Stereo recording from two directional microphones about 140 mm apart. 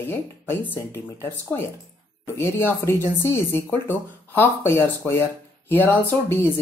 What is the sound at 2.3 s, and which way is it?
Speech, 15° left (ahead or behind).